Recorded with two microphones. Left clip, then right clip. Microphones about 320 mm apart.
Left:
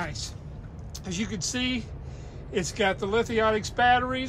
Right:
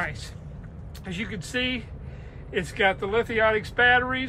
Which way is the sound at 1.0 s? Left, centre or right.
Centre.